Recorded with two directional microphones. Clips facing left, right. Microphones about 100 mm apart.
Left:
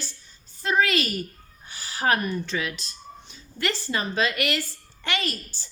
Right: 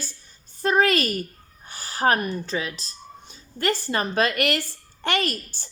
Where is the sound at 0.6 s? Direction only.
45° right (ahead or behind).